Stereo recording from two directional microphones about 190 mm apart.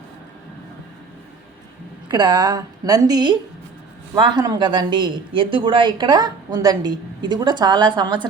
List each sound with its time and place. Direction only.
2.0 s speech: 20° right (ahead or behind)